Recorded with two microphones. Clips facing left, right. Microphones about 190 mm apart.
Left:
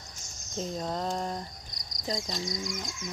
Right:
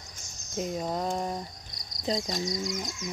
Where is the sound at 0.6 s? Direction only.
10° right (ahead or behind).